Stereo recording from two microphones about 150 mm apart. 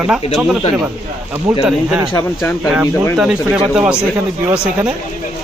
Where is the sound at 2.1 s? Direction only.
15° left (ahead or behind).